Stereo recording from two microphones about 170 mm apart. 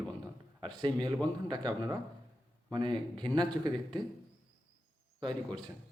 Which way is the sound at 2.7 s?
30° right (ahead or behind).